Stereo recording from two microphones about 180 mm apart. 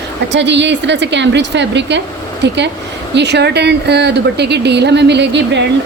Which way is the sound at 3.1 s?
70° right (ahead or behind).